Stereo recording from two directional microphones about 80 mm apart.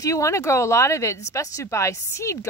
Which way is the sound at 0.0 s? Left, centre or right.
Left.